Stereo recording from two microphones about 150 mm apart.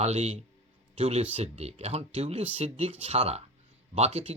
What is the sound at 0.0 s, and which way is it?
Speech, 45° right (ahead or behind).